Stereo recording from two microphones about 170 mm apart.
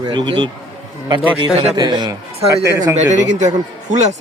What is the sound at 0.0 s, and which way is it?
Speech, 25° right (ahead or behind).